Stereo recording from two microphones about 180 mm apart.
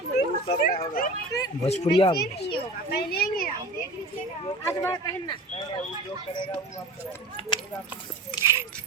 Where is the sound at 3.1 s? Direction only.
55° left (ahead or behind).